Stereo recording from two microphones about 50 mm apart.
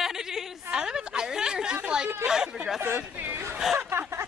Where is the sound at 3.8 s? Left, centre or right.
Right.